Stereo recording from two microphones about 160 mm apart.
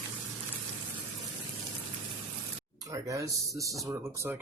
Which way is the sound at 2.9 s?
20° right (ahead or behind).